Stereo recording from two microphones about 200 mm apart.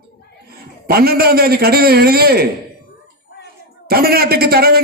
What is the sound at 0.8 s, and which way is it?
A man's voice, 50° right (ahead or behind).